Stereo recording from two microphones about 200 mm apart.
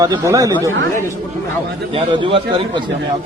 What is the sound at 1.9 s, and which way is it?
Speech, 25° right (ahead or behind).